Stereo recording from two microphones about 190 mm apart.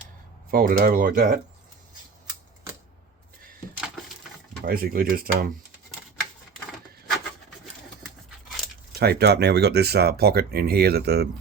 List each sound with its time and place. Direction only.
0.5 s speech: 50° right (ahead or behind)
4.6 s speech: 50° right (ahead or behind)
9.0 s speech: 55° right (ahead or behind)